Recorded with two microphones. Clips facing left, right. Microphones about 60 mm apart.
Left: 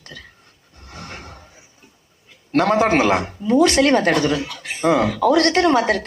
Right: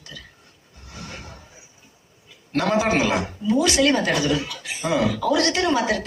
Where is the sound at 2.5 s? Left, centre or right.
Left.